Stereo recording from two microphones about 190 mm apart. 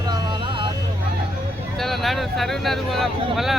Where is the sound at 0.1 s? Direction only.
25° right (ahead or behind).